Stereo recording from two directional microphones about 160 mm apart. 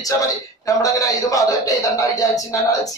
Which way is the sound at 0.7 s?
20° left (ahead or behind).